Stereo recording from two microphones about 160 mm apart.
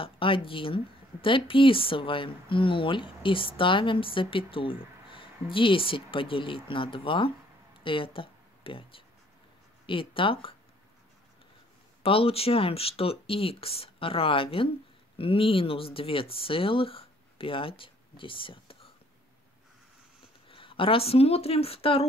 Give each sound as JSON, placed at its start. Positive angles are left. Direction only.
{"t": 0.0, "sound": "speech", "side_deg": 35}
{"t": 12.0, "sound": "speech", "side_deg": 35}
{"t": 20.4, "sound": "speech", "side_deg": 35}